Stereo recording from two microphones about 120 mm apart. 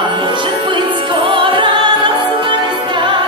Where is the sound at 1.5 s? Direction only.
40° right (ahead or behind).